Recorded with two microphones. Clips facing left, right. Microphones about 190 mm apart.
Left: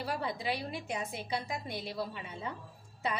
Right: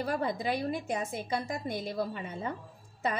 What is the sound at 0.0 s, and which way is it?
A woman's voice, 45° right (ahead or behind).